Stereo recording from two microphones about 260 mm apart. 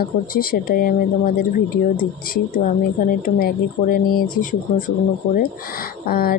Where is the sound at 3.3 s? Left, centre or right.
Left.